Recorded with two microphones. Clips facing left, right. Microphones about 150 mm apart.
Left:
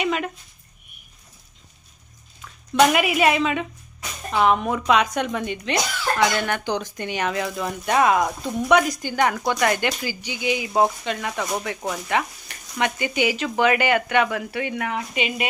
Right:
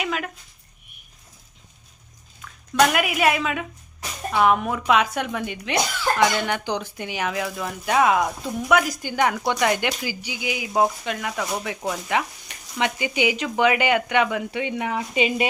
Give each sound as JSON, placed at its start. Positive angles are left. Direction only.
{"t": 0.0, "sound": "speech", "side_deg": 0}
{"t": 2.4, "sound": "speech", "side_deg": 0}
{"t": 4.4, "sound": "frying", "side_deg": -5}
{"t": 7.9, "sound": "speech", "side_deg": -5}
{"t": 8.7, "sound": "frying", "side_deg": -5}
{"t": 11.0, "sound": "speech", "side_deg": -5}
{"t": 12.1, "sound": "frying", "side_deg": -15}
{"t": 14.8, "sound": "speech", "side_deg": -25}